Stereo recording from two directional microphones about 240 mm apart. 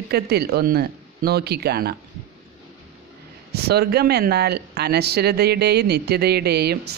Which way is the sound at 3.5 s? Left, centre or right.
Right.